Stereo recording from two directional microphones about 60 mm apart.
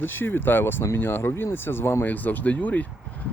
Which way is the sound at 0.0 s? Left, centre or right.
Left.